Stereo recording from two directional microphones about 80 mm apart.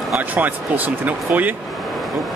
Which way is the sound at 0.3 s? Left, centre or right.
Right.